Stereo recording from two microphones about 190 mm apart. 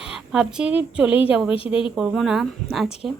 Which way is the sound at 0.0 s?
5° right (ahead or behind).